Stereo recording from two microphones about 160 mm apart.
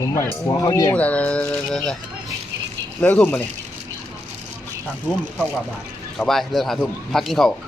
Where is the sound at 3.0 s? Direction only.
10° left (ahead or behind).